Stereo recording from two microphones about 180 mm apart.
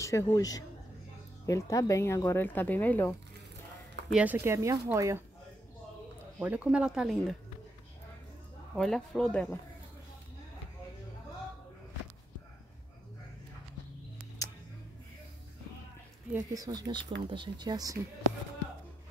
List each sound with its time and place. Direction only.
0.0 s speech: 15° left (ahead or behind)
4.1 s speech: 10° right (ahead or behind)
6.4 s speech: 10° right (ahead or behind)
8.7 s speech: centre (ahead or behind)
16.3 s speech: 20° right (ahead or behind)